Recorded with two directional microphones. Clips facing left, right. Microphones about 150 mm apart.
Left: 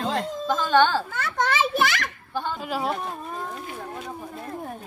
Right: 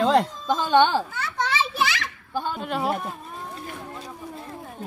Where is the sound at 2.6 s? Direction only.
Centre (ahead or behind).